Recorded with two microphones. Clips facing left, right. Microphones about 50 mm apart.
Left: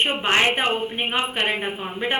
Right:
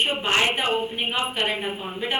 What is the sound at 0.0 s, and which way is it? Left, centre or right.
A woman's voice, left.